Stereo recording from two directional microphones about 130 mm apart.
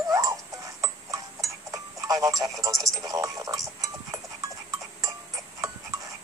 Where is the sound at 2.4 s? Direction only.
25° right (ahead or behind).